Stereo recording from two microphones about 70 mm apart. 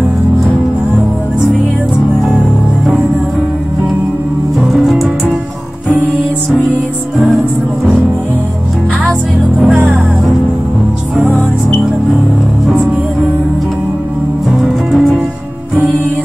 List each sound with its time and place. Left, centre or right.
4.6 s music: centre
9.7 s music: centre
14.6 s music: centre